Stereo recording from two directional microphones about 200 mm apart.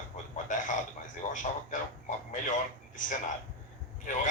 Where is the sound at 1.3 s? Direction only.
40° left (ahead or behind).